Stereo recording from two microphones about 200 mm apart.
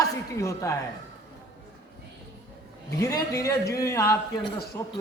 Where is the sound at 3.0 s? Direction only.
15° left (ahead or behind).